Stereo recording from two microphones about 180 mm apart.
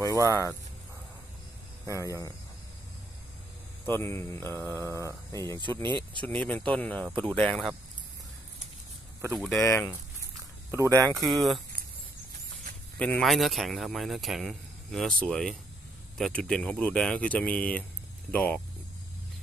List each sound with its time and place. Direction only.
0.0 s speech: 20° left (ahead or behind)
1.9 s speech: 15° left (ahead or behind)
3.8 s speech: 10° left (ahead or behind)
5.6 s speech: 25° right (ahead or behind)
6.2 s speech: 5° left (ahead or behind)
9.6 s speech: 15° left (ahead or behind)
10.7 s speech: 15° right (ahead or behind)
11.3 s speech: centre (ahead or behind)
13.0 s speech: 5° left (ahead or behind)